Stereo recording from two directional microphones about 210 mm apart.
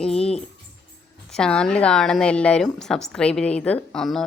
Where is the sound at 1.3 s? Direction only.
5° left (ahead or behind).